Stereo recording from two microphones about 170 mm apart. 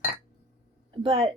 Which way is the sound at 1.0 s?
30° right (ahead or behind).